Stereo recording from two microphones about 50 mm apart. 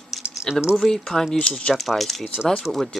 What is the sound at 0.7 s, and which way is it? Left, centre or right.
Speech, centre.